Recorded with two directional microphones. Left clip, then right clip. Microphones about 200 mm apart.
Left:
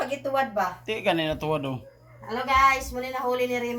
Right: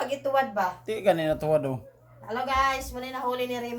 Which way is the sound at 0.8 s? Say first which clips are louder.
Right 1 dB; 35° right (ahead or behind).